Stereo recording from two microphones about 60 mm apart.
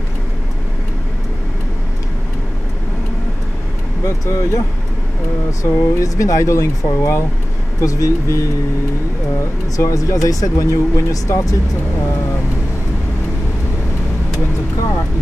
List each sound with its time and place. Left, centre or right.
4.0 s speech: left
5.6 s speech: left
7.8 s speech: left
9.4 s speech: left